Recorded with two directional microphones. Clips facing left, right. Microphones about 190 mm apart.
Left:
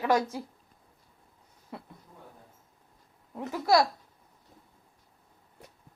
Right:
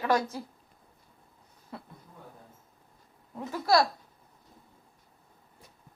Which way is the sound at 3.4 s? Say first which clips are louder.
Left 1 dB; 20° left (ahead or behind).